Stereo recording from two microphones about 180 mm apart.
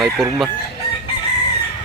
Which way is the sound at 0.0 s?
Centre (ahead or behind).